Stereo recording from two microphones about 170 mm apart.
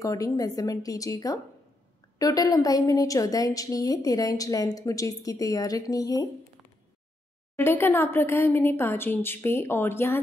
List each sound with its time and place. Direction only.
0.0 s a woman's voice: 20° left (ahead or behind)
7.5 s speech: 15° left (ahead or behind)